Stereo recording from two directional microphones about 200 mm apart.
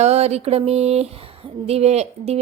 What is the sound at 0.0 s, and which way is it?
Speech, 30° right (ahead or behind).